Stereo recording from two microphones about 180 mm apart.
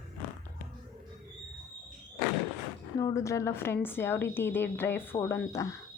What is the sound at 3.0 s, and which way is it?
A woman's voice, 20° left (ahead or behind).